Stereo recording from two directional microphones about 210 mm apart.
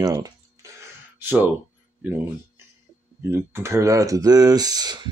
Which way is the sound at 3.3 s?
10° right (ahead or behind).